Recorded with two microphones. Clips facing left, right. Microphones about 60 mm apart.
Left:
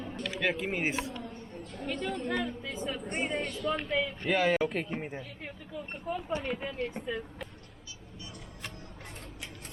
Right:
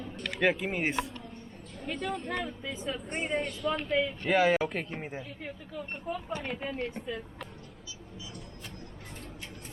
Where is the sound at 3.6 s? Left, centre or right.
Centre.